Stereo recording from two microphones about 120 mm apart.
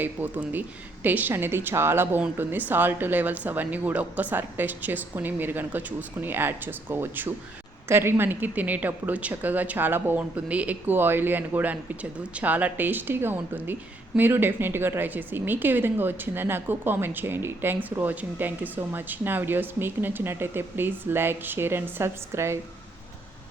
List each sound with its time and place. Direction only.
0.0 s a woman's voice: 15° right (ahead or behind)